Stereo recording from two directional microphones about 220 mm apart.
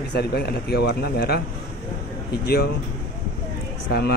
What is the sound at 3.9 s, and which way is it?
Speech, 50° left (ahead or behind).